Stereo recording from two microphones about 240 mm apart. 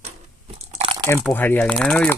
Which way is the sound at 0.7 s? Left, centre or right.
Right.